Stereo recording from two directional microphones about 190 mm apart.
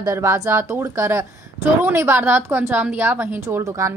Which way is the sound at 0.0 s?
15° right (ahead or behind).